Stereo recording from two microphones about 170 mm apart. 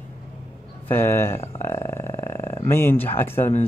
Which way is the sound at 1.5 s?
15° left (ahead or behind).